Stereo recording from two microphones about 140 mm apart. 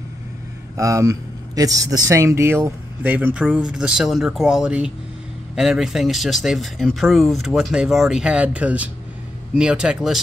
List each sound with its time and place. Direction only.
0.7 s speech: 20° right (ahead or behind); by 10.2 s 5° right (ahead or behind)